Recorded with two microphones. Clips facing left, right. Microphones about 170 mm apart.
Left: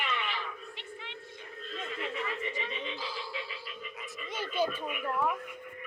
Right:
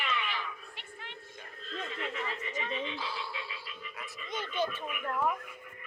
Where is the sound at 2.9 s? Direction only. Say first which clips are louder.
Even; 60° right (ahead or behind).